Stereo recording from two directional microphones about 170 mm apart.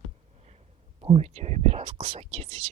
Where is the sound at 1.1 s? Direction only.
40° right (ahead or behind).